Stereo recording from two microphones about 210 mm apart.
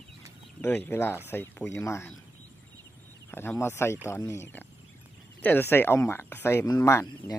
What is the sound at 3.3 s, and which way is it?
Speech, 10° left (ahead or behind).